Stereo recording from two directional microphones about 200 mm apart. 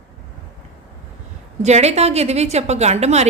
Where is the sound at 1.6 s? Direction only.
35° right (ahead or behind).